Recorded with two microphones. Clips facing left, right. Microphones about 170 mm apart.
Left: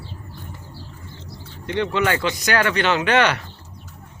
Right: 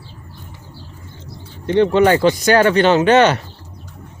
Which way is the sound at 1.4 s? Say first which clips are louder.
Right 9 dB; 30° right (ahead or behind).